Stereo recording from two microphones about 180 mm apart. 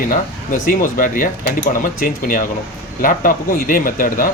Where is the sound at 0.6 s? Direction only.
50° left (ahead or behind).